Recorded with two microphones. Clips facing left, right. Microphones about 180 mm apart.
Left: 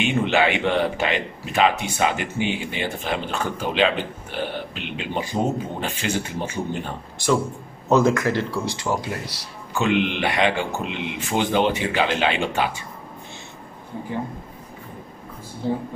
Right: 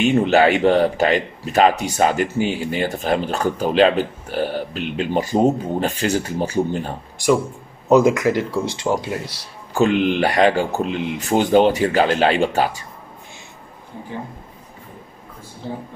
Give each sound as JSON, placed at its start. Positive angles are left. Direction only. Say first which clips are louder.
{"t": 0.0, "sound": "a man's voice", "louder": "right 5 dB", "side_deg": -40}
{"t": 7.9, "sound": "speech", "louder": "right 4 dB", "side_deg": -15}
{"t": 9.7, "sound": "a man's voice", "louder": "right 5 dB", "side_deg": -40}